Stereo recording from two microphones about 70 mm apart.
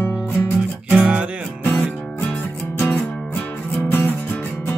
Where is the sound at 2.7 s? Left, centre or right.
Left.